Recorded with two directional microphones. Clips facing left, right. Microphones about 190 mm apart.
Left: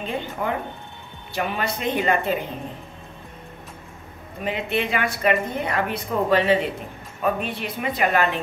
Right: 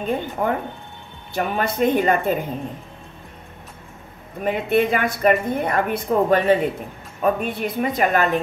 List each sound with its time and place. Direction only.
0.0 s a woman's voice: 50° right (ahead or behind)
4.5 s a woman's voice: 50° right (ahead or behind)